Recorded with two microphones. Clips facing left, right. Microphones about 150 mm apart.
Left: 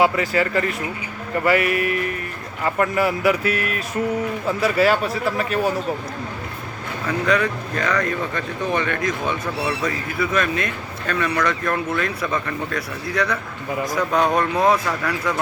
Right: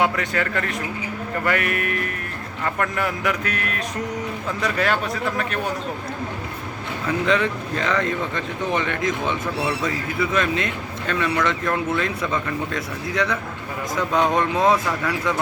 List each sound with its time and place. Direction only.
0.0 s speech: 5° left (ahead or behind)
7.3 s speech: 25° right (ahead or behind)